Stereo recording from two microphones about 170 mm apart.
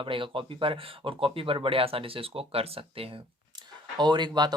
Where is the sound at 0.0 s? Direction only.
30° right (ahead or behind).